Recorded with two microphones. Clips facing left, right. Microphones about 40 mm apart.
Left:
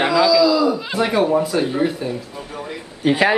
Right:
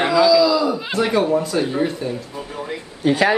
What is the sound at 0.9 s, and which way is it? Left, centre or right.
Speech, centre.